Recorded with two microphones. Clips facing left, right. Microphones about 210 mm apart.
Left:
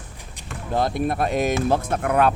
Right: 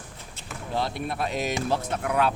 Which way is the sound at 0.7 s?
50° left (ahead or behind).